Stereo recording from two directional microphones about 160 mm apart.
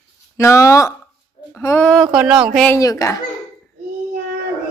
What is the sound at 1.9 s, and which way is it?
Speech, centre (ahead or behind).